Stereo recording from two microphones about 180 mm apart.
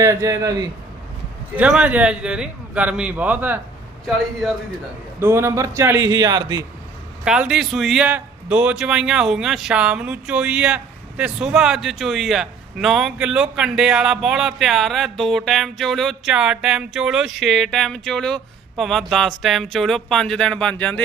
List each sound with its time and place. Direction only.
0.0 s a man's voice: 15° right (ahead or behind)
1.5 s a man's voice: 5° right (ahead or behind)
5.2 s a man's voice: 15° right (ahead or behind)
7.3 s a man's voice: 5° right (ahead or behind)